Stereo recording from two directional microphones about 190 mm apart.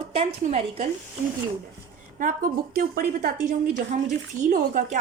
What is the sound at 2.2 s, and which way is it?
A woman's voice, 45° right (ahead or behind).